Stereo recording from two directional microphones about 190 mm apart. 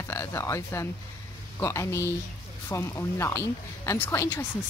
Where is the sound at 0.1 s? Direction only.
15° left (ahead or behind).